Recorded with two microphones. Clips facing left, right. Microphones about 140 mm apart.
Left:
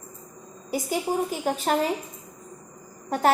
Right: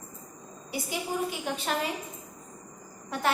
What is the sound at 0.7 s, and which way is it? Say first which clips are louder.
A woman's voice: left 6 dB; 40° left (ahead or behind).